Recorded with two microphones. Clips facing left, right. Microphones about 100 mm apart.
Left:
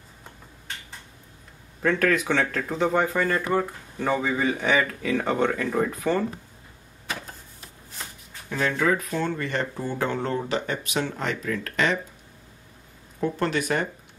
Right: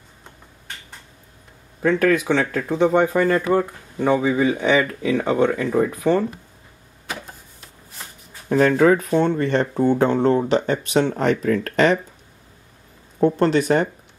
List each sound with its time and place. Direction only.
1.8 s speech: 15° right (ahead or behind)
7.1 s a sound: 10° right (ahead or behind)
8.5 s speech: 40° right (ahead or behind)
9.2 s speech: 25° right (ahead or behind)
13.2 s speech: 30° right (ahead or behind)